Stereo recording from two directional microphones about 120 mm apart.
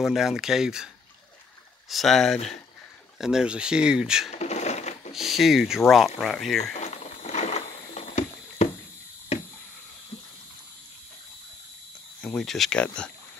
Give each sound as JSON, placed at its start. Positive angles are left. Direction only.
{"t": 0.0, "sound": "speech", "side_deg": 0}
{"t": 1.9, "sound": "speech", "side_deg": 0}
{"t": 4.3, "sound": "sewing machine", "side_deg": 70}
{"t": 5.1, "sound": "speech", "side_deg": 0}
{"t": 6.7, "sound": "a sound", "side_deg": 75}
{"t": 12.2, "sound": "speech", "side_deg": 5}